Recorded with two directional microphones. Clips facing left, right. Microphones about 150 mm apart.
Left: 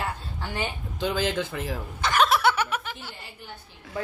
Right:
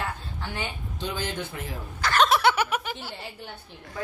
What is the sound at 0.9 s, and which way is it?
Speech, 90° left.